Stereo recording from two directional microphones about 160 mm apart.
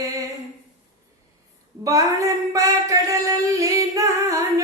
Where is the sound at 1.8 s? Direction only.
20° right (ahead or behind).